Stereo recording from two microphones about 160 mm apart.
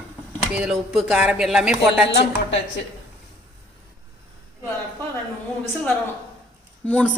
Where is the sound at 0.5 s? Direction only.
5° right (ahead or behind).